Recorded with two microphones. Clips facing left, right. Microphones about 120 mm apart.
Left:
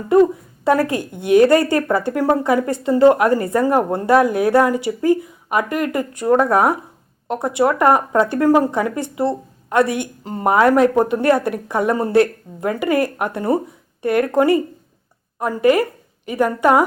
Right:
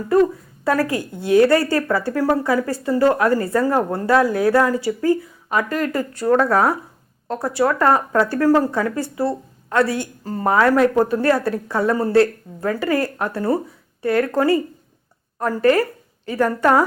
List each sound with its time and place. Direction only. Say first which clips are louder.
0.1 s a woman's voice: left 3 dB; 25° left (ahead or behind)